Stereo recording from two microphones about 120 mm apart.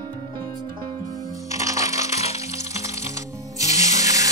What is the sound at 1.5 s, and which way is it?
Music, 25° right (ahead or behind).